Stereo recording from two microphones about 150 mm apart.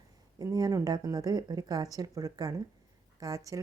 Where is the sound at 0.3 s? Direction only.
25° right (ahead or behind).